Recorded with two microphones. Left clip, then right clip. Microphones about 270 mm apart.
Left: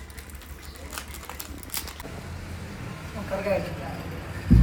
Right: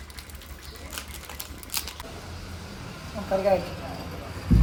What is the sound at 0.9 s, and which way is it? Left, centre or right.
Typewriter, centre.